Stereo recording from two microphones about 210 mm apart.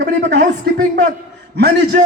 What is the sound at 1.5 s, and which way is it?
Speech, 50° right (ahead or behind).